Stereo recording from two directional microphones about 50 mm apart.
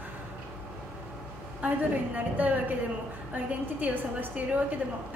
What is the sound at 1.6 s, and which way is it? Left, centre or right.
A woman's voice, right.